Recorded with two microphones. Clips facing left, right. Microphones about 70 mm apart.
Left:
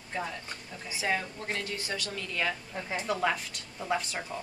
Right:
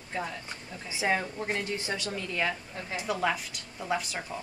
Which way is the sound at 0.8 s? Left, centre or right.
Centre.